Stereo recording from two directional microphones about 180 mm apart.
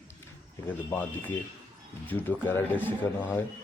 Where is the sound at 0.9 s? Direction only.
10° left (ahead or behind).